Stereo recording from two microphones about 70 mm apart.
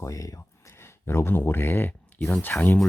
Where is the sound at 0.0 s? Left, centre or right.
Left.